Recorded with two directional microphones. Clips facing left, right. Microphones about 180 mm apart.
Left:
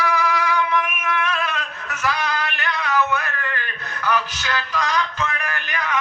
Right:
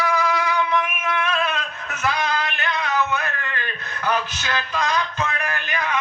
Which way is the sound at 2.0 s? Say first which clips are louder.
Right 1 dB; 20° right (ahead or behind).